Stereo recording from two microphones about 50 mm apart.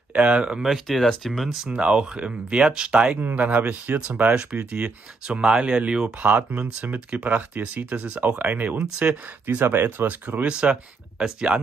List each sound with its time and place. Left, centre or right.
0.1 s speech: right
0.6 s speech: centre
1.7 s speech: right
3.2 s speech: right; by 6.1 s centre
7.1 s speech: right
9.6 s speech: right
10.0 s speech: right
10.4 s speech: centre